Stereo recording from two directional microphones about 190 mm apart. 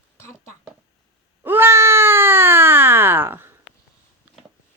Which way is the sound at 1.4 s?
10° right (ahead or behind).